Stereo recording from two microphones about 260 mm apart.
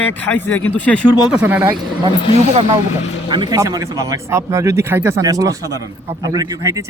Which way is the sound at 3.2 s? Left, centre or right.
Centre.